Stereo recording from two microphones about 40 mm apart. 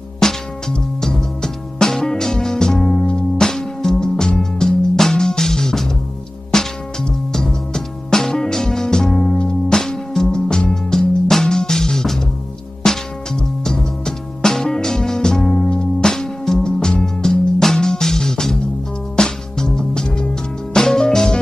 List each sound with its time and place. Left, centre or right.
0.2 s music: centre